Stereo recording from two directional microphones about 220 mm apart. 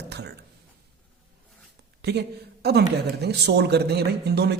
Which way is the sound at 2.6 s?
50° right (ahead or behind).